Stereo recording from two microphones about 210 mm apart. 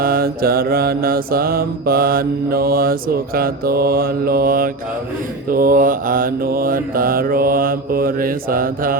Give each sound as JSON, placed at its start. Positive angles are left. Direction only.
{"t": 0.0, "sound": "mantra", "side_deg": -45}